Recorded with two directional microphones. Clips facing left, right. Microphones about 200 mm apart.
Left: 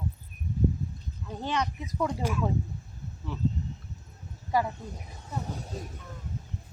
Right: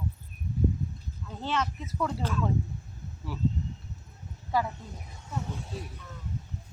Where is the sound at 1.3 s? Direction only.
15° left (ahead or behind).